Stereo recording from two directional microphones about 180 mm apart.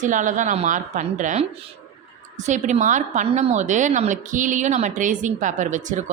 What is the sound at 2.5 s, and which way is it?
A woman's voice, 40° right (ahead or behind).